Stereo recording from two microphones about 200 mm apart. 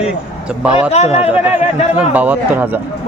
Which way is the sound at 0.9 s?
30° left (ahead or behind).